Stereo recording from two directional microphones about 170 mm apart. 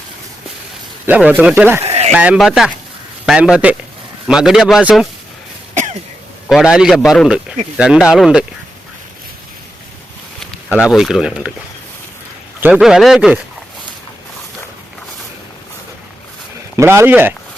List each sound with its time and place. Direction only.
1.0 s speech: 10° right (ahead or behind)
1.8 s a sound: 40° right (ahead or behind)
2.1 s a man's voice: 5° right (ahead or behind)
5.7 s cough: 45° right (ahead or behind)
6.5 s a man's voice: 5° right (ahead or behind)
10.7 s a man's voice: 5° right (ahead or behind)
12.5 s a man's voice: 10° right (ahead or behind)
16.7 s speech: 15° right (ahead or behind)